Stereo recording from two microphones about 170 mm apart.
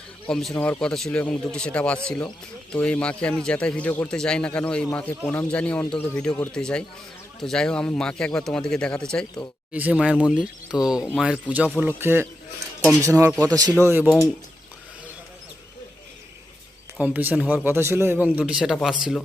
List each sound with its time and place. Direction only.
0.3 s a man's voice: 5° left (ahead or behind)
9.7 s a man's voice: 10° right (ahead or behind)
17.0 s a man's voice: 10° right (ahead or behind)